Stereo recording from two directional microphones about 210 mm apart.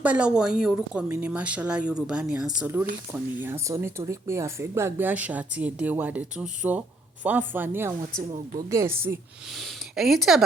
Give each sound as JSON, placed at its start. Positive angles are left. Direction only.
{"t": 0.0, "sound": "speech", "side_deg": -5}
{"t": 9.6, "sound": "speech", "side_deg": 0}